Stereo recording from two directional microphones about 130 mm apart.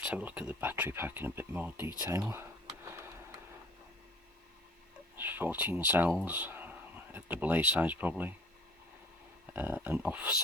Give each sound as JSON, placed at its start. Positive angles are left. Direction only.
{"t": 0.0, "sound": "speech", "side_deg": -10}
{"t": 2.3, "sound": "a sound", "side_deg": -20}
{"t": 5.1, "sound": "speech", "side_deg": -15}
{"t": 9.5, "sound": "speech", "side_deg": -15}